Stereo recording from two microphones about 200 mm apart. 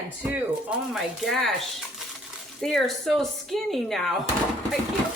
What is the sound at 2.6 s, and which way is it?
Speech, centre (ahead or behind).